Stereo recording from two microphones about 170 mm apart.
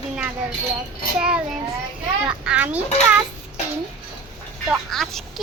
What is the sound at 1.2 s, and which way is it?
Child singing, 5° right (ahead or behind).